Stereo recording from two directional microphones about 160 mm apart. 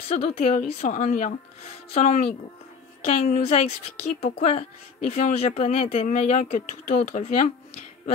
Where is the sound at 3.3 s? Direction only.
40° left (ahead or behind).